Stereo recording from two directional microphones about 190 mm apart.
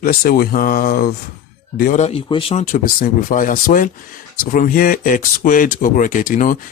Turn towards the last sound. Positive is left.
turn(degrees=45)  # may be behind; listen again after turning